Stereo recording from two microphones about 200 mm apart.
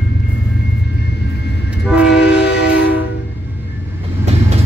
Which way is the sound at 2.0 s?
55° left (ahead or behind).